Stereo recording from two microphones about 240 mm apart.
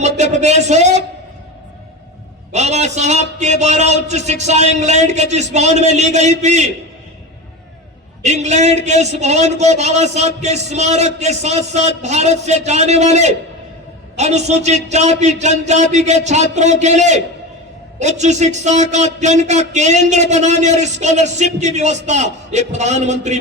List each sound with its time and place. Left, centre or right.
0.2 s speech: right
2.5 s speech: right
8.2 s speech: right
18.2 s speech: right